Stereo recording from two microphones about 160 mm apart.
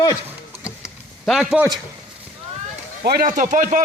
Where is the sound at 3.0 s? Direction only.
65° right (ahead or behind).